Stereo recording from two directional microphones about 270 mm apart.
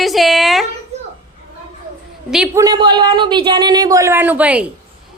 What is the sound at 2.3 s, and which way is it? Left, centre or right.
A woman's voice, centre.